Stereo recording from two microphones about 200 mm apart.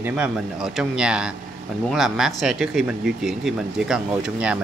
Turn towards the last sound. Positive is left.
turn(degrees=-5)  # may be behind; listen again after turning